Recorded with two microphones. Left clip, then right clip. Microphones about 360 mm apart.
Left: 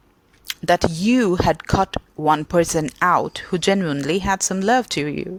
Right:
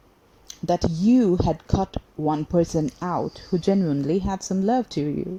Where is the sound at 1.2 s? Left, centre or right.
Left.